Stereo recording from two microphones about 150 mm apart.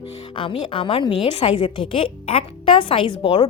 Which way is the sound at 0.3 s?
35° left (ahead or behind).